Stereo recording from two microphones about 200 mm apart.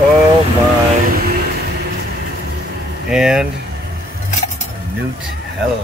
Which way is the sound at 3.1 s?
Centre (ahead or behind).